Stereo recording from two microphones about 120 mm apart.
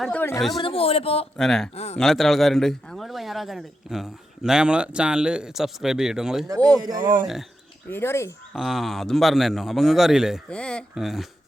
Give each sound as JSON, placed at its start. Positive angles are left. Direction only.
{"t": 0.0, "sound": "speech", "side_deg": 15}
{"t": 0.3, "sound": "a man's voice", "side_deg": 0}
{"t": 0.6, "sound": "speech", "side_deg": 50}
{"t": 1.4, "sound": "a man's voice", "side_deg": 5}
{"t": 1.7, "sound": "speech", "side_deg": 60}
{"t": 2.0, "sound": "a man's voice", "side_deg": 0}
{"t": 6.7, "sound": "speech", "side_deg": -30}
{"t": 7.9, "sound": "speech", "side_deg": 20}
{"t": 8.5, "sound": "a man's voice", "side_deg": 0}
{"t": 10.5, "sound": "speech", "side_deg": 10}
{"t": 10.9, "sound": "a man's voice", "side_deg": 0}